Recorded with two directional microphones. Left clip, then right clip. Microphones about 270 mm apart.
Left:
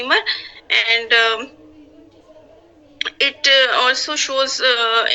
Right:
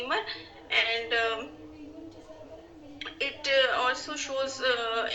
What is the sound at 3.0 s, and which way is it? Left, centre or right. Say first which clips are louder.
Speech: left 15 dB; left.